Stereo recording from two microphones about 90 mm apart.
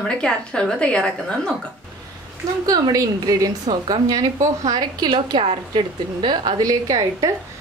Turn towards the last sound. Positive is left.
turn(degrees=-45)  # may be behind; listen again after turning